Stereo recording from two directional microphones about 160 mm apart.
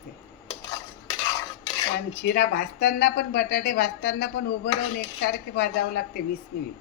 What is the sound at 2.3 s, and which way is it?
A woman's voice, 80° left.